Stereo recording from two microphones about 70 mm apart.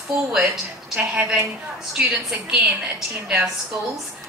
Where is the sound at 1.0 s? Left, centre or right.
Centre.